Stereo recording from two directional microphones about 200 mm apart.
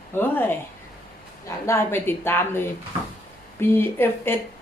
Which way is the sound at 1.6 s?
10° left (ahead or behind).